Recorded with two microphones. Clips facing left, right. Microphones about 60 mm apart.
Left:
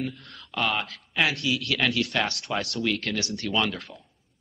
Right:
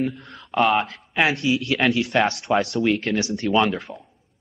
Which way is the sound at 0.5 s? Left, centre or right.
Right.